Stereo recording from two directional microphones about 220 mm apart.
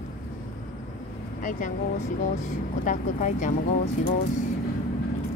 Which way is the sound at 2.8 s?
35° left (ahead or behind).